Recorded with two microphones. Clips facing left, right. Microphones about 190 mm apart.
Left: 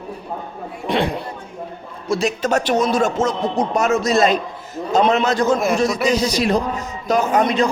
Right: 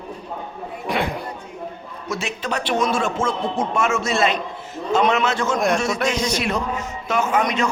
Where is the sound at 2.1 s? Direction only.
40° left (ahead or behind).